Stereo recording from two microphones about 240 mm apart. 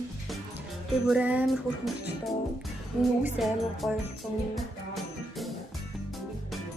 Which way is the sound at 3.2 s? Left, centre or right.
Centre.